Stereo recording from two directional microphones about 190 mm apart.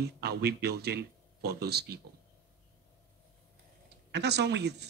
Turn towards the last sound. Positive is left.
turn(degrees=-60)  # may be behind; listen again after turning